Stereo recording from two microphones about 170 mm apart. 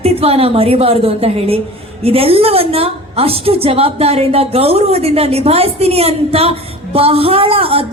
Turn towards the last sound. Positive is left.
turn(degrees=-35)  # may be behind; listen again after turning